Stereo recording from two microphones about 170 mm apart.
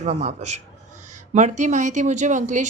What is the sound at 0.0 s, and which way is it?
Speech, 40° right (ahead or behind).